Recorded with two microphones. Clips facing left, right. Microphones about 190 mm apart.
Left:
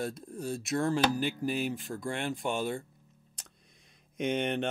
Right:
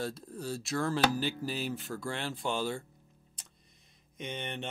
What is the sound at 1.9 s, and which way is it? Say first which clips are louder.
Speech: left 1 dB; 25° left (ahead or behind).